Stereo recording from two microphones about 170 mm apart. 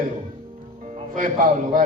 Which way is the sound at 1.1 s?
50° right (ahead or behind).